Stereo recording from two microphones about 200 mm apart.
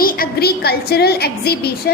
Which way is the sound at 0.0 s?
45° left (ahead or behind).